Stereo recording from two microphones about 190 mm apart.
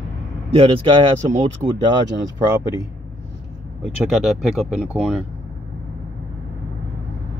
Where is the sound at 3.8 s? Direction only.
Centre (ahead or behind).